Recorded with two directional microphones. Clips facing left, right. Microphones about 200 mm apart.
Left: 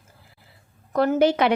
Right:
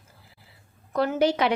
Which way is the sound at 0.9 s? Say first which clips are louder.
Left 4 dB; 50° left (ahead or behind).